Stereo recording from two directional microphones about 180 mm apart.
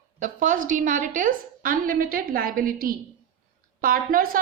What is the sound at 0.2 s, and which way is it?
A woman's voice, 50° right (ahead or behind).